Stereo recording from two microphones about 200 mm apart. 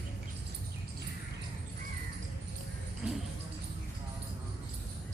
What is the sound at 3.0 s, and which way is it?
Basketball bounce, 5° right (ahead or behind).